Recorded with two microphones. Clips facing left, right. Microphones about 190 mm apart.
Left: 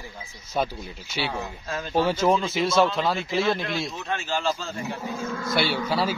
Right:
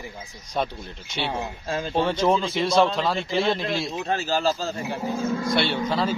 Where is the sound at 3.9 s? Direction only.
35° right (ahead or behind).